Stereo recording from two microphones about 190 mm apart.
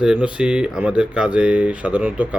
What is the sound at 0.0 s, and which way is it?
Speech, 5° right (ahead or behind).